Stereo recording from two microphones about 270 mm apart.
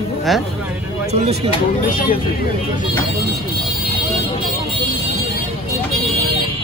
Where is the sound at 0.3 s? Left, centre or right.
Centre.